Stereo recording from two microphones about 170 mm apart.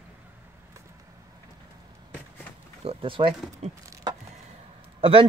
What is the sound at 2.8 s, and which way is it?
Speech, 35° right (ahead or behind).